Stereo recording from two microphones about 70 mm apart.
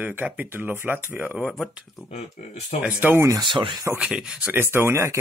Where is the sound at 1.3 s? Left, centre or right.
Centre.